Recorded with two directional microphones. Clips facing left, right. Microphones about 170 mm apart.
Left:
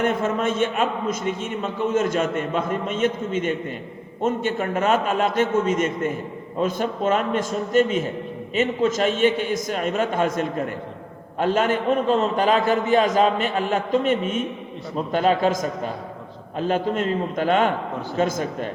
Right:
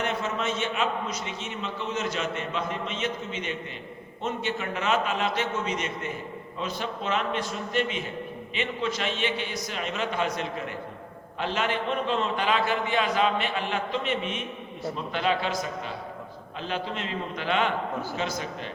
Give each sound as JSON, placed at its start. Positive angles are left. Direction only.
{"t": 0.0, "sound": "a man's voice", "side_deg": 50}